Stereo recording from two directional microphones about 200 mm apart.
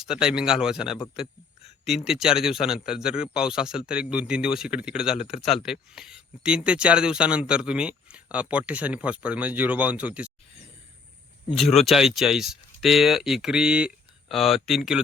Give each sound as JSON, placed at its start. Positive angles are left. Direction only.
{"t": 0.0, "sound": "speech", "side_deg": -5}
{"t": 1.2, "sound": "a sound", "side_deg": 30}
{"t": 2.0, "sound": "speech", "side_deg": -5}
{"t": 11.5, "sound": "speech", "side_deg": 0}